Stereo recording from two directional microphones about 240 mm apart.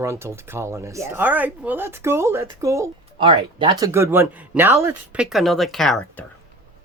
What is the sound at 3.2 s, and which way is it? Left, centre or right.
Speech, right.